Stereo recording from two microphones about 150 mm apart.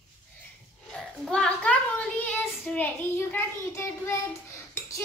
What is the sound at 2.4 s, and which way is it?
Child singing, 10° left (ahead or behind).